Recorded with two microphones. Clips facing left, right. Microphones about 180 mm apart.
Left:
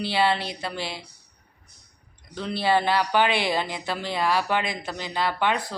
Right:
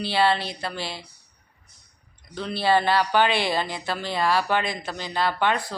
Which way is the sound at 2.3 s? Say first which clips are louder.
Right 1 dB; 15° left (ahead or behind).